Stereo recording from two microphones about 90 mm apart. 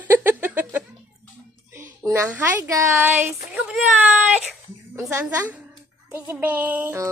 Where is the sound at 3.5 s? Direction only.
5° right (ahead or behind).